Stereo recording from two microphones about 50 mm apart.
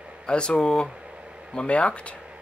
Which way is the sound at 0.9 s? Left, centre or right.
Centre.